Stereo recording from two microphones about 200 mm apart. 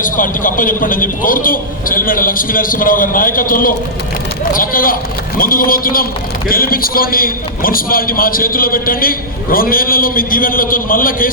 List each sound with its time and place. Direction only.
0.0 s a man's voice: 40° left (ahead or behind)